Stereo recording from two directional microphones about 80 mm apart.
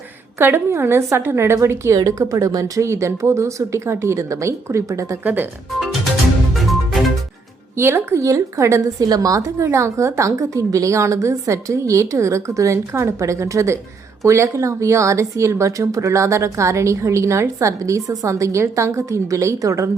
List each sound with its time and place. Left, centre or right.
0.3 s speech: right
5.2 s speech: right
6.5 s music: centre
7.8 s speech: right
9.7 s speech: right